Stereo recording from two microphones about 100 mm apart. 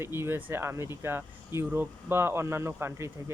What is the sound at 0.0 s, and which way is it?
Speech, 25° right (ahead or behind).